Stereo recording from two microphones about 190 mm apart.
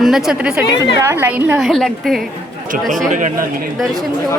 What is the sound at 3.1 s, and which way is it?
Speech, 40° right (ahead or behind).